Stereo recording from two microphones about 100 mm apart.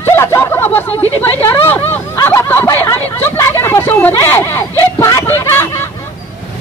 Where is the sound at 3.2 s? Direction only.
25° left (ahead or behind).